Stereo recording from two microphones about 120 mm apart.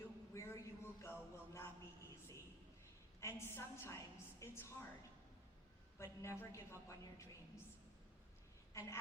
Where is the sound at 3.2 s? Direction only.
20° left (ahead or behind).